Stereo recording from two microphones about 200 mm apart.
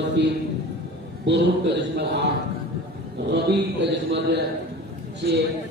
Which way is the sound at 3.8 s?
60° right (ahead or behind).